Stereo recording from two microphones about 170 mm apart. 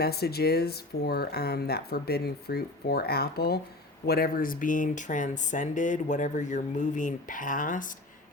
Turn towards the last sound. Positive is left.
turn(degrees=50)  # may be behind; listen again after turning